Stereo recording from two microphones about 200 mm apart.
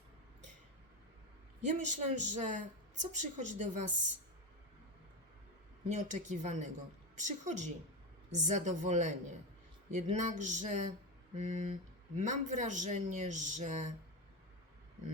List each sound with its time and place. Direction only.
1.6 s a man's voice: 35° right (ahead or behind)
5.9 s a man's voice: 35° right (ahead or behind)